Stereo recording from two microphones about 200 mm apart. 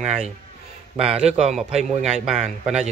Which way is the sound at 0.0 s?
35° right (ahead or behind).